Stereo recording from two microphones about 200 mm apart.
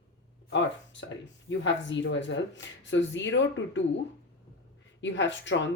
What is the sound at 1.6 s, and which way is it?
Speech, 65° left (ahead or behind).